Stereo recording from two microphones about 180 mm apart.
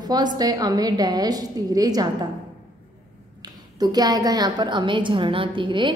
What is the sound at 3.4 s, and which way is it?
A woman's voice, 20° right (ahead or behind).